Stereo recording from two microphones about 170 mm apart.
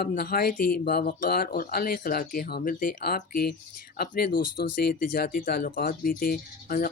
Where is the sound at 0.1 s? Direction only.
60° left (ahead or behind).